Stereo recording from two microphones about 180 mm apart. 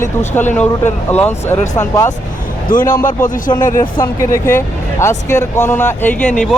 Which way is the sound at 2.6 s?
50° left (ahead or behind).